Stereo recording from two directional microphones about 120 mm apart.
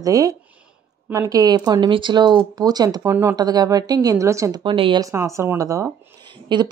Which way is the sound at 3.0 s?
20° right (ahead or behind).